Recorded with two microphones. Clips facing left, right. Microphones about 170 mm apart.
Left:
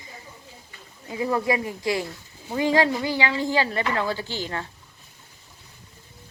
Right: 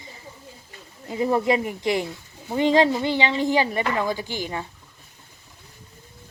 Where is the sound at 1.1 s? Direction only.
25° right (ahead or behind).